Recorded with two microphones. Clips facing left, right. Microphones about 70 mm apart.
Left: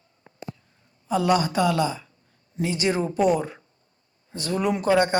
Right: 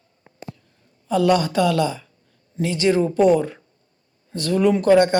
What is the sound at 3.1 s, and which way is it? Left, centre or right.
Speech, centre.